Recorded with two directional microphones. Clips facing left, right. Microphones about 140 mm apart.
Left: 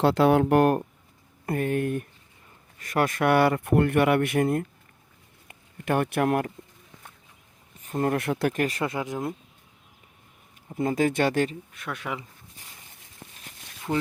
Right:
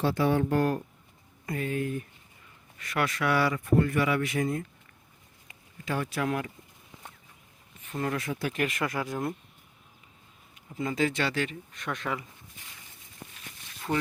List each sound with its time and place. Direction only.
0.0 s speech: 70° left (ahead or behind)
2.7 s speech: 45° left (ahead or behind)
7.8 s a sound: 40° left (ahead or behind)
8.2 s speech: 65° left (ahead or behind)
8.5 s speech: 35° left (ahead or behind)
8.8 s speech: 20° left (ahead or behind)
10.8 s speech: 50° left (ahead or behind)
11.7 s speech: 5° left (ahead or behind)